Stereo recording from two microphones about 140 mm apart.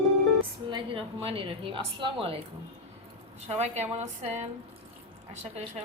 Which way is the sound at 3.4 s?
50° right (ahead or behind).